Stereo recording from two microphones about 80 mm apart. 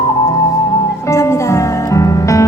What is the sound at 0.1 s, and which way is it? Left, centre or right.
Music, left.